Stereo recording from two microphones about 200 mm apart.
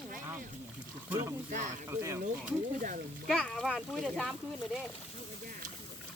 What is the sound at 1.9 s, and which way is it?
Speech, 15° right (ahead or behind).